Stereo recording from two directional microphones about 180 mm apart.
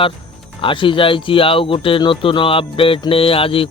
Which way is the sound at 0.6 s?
30° left (ahead or behind).